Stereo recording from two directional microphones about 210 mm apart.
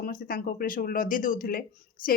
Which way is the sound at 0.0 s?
40° left (ahead or behind).